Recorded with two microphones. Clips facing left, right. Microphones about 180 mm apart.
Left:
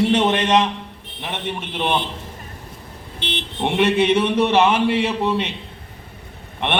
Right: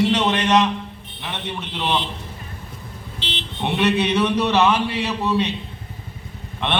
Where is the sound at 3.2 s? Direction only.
55° left (ahead or behind).